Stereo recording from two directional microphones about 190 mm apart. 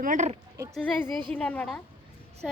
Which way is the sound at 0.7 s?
5° left (ahead or behind).